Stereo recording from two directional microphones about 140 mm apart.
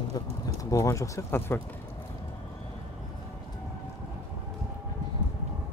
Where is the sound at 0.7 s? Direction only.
20° left (ahead or behind).